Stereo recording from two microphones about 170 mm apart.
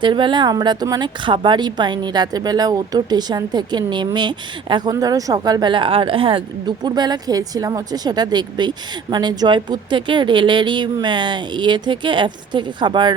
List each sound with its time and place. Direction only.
0.0 s speech: 30° right (ahead or behind)